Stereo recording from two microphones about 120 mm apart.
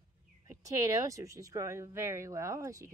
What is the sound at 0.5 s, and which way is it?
Speech, 30° right (ahead or behind).